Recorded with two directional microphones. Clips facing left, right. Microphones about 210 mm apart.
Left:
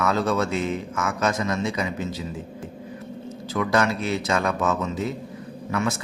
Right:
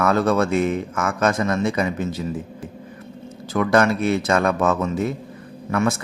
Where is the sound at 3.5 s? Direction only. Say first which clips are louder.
Right 5 dB; 55° right (ahead or behind).